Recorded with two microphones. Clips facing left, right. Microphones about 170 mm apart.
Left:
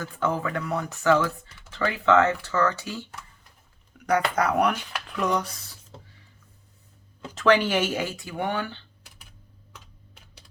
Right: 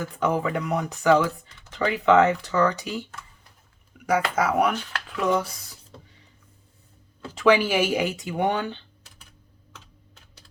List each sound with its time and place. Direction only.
0.0 s speech: 15° right (ahead or behind)
4.0 s speech: 5° right (ahead or behind)
7.3 s speech: 10° right (ahead or behind)